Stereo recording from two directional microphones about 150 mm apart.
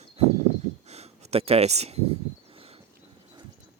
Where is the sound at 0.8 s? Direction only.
45° right (ahead or behind).